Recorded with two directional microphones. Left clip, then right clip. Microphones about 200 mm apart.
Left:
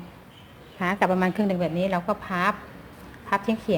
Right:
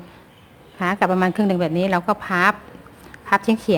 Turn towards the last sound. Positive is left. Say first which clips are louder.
# right 6 dB
turn(degrees=-35)  # may be behind; listen again after turning